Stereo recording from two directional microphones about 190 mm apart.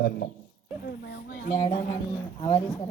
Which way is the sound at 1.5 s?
30° left (ahead or behind).